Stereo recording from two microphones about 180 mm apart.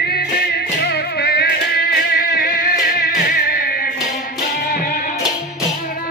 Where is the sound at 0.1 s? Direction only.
60° left (ahead or behind).